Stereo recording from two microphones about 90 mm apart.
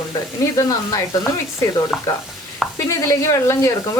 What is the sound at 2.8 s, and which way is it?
Stir, 35° left (ahead or behind).